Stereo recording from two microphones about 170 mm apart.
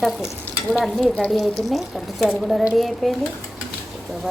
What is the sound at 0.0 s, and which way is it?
Speech, centre (ahead or behind).